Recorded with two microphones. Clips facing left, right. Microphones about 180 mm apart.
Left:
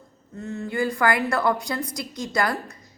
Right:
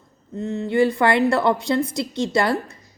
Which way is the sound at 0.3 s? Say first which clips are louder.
Right 7 dB; 20° right (ahead or behind).